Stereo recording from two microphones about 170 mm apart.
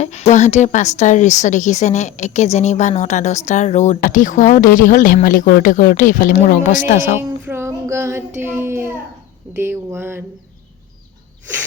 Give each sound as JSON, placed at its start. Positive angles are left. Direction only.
{"t": 0.0, "sound": "speech", "side_deg": 40}
{"t": 7.2, "sound": "child singing", "side_deg": -15}
{"t": 9.5, "sound": "a sound", "side_deg": -15}